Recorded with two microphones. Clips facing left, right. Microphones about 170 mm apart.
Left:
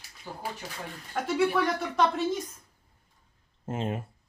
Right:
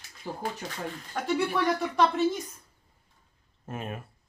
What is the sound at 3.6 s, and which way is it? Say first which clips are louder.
Speech: left 5 dB; 25° left (ahead or behind).